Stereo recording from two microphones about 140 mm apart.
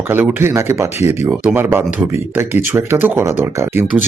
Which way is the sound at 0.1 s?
15° right (ahead or behind).